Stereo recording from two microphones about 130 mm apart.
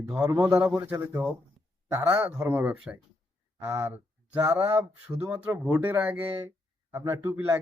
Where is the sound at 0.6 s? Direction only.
20° right (ahead or behind).